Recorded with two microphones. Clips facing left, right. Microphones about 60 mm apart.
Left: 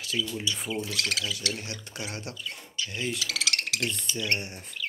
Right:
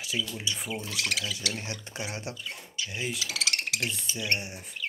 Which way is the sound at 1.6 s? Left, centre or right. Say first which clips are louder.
Right 1 dB; right.